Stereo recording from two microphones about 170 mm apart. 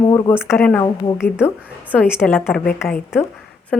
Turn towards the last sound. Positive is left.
turn(degrees=5)  # may be behind; listen again after turning